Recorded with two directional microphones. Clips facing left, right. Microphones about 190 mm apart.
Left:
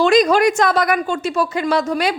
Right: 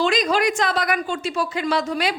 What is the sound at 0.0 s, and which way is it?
A woman's voice, 45° left (ahead or behind).